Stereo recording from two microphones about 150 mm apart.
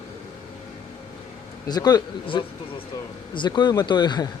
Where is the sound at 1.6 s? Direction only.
25° left (ahead or behind).